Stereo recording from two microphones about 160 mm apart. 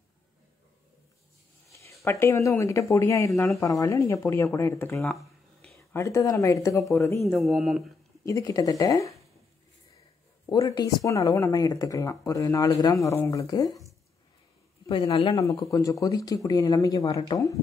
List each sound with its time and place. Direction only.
1.7 s speech: 20° left (ahead or behind)
5.0 s a sound: centre (ahead or behind)
5.9 s speech: 20° left (ahead or behind)
7.2 s speech: centre (ahead or behind)
8.3 s speech: 20° left (ahead or behind)
10.5 s speech: 25° left (ahead or behind)
15.1 s speech: 25° left (ahead or behind)